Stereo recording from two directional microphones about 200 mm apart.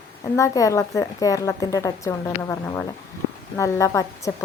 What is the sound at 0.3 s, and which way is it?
A woman's voice, 15° left (ahead or behind).